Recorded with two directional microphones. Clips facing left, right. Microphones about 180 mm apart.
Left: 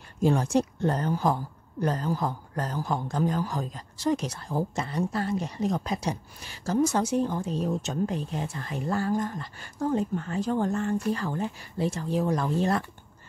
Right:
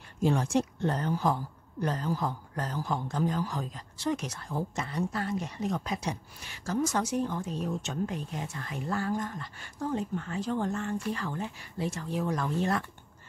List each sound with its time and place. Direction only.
0.2 s a woman's voice: 40° left (ahead or behind)